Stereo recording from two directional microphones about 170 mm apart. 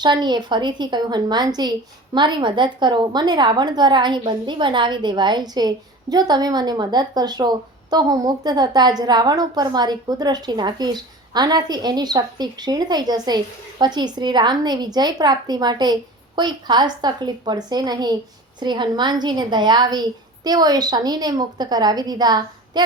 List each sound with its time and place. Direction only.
0.0 s a woman's voice: 25° right (ahead or behind)